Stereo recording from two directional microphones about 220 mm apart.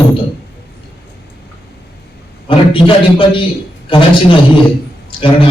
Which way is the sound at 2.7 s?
25° left (ahead or behind).